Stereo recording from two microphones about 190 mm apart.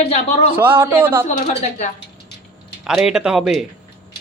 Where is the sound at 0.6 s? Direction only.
25° right (ahead or behind).